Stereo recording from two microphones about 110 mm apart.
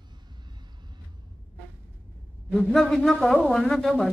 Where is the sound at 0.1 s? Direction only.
40° right (ahead or behind).